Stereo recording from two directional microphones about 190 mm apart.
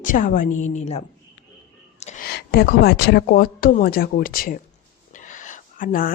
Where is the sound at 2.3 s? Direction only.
55° left (ahead or behind).